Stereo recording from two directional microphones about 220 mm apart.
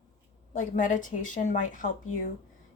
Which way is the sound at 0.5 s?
35° left (ahead or behind).